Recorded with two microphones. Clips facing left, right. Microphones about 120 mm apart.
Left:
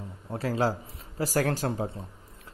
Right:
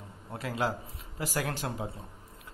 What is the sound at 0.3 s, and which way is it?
Speech, 35° left (ahead or behind).